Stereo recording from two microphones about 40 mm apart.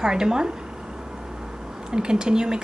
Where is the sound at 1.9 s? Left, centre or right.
Centre.